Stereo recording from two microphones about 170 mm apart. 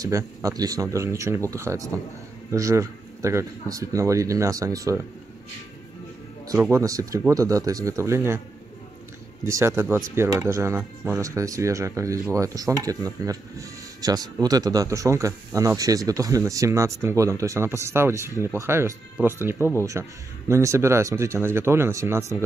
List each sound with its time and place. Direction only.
0.0 s speech: 20° right (ahead or behind)
6.4 s speech: 20° right (ahead or behind)
9.4 s speech: 15° right (ahead or behind)